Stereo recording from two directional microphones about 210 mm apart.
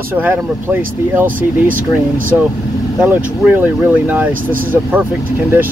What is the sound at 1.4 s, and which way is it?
Speech, 40° right (ahead or behind).